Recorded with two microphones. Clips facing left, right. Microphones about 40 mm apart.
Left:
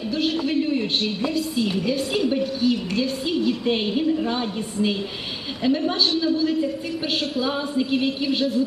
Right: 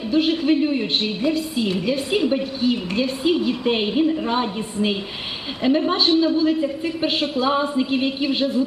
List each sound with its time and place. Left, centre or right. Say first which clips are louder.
0.1 s a woman's voice: right 5 dB; right